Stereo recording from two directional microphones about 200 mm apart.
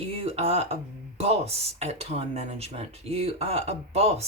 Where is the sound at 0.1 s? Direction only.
30° right (ahead or behind).